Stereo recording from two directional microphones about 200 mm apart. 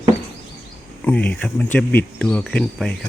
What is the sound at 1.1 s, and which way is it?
Speech, 5° left (ahead or behind).